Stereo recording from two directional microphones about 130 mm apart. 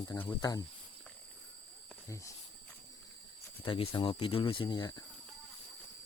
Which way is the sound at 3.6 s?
40° left (ahead or behind).